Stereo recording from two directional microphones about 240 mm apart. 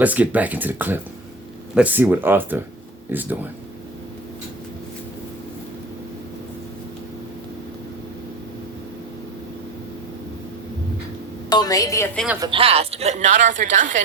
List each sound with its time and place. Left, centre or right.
0.0 s speech: centre
11.4 s a woman's voice: centre
12.1 s speech: centre
12.4 s a woman's voice: right